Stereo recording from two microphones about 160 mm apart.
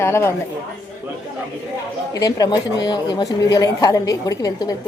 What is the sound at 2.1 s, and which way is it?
A woman's voice, 25° left (ahead or behind).